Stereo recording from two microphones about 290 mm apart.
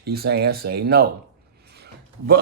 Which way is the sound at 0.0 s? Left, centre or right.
Right.